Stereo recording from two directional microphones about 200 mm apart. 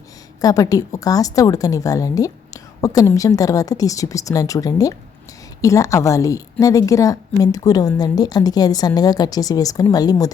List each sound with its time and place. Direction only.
0.4 s a woman's voice: 15° left (ahead or behind)